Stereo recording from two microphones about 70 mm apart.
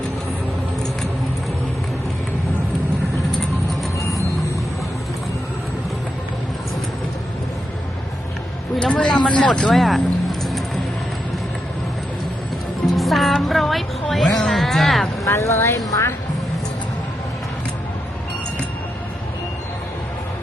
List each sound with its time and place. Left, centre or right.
3.9 s vehicle: left
8.8 s speech: centre
9.8 s music: centre
12.9 s speech: centre
15.2 s a woman's voice: left